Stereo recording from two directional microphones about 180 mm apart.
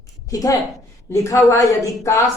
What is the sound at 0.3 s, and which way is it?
A woman's voice, 20° left (ahead or behind).